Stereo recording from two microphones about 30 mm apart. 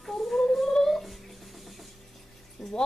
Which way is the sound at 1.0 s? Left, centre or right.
Centre.